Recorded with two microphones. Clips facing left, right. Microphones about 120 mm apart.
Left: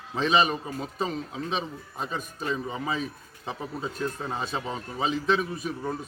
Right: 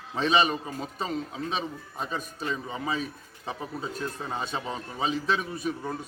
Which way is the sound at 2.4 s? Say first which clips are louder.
Left 4 dB; 35° left (ahead or behind).